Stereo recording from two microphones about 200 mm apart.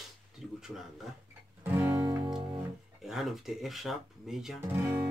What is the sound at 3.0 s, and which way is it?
Speech, centre (ahead or behind).